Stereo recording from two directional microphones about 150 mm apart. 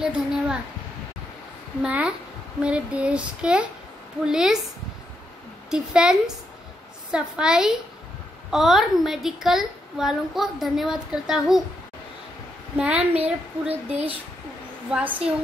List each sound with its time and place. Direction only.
0.0 s a woman's voice: 5° right (ahead or behind)
1.8 s female singing: 5° right (ahead or behind)
4.2 s a woman's voice: 5° right (ahead or behind)
5.7 s a woman's voice: 5° right (ahead or behind)
12.7 s female singing: 5° right (ahead or behind)
13.7 s speech: 40° right (ahead or behind)
14.9 s female singing: 10° right (ahead or behind)